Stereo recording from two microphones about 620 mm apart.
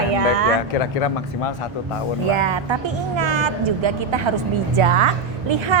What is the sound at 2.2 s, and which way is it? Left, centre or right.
A woman's voice, right.